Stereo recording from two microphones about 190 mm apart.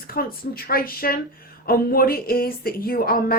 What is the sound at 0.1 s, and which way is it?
A woman's voice, 50° left (ahead or behind).